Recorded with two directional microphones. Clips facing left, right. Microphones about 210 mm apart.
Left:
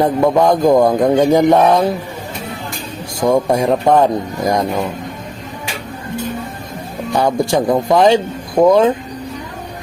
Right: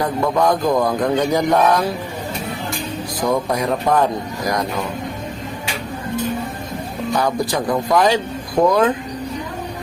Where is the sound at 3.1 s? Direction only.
25° left (ahead or behind).